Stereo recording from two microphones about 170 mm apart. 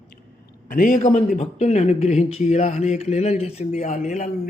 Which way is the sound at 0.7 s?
55° left (ahead or behind).